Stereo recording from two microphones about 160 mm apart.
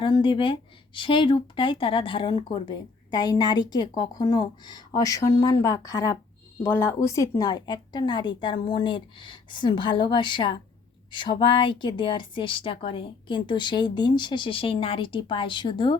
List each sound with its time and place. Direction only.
0.0 s a woman's voice: 30° left (ahead or behind)